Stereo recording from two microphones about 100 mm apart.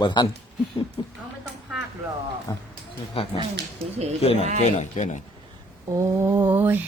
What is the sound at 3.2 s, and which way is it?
Speech, 80° left.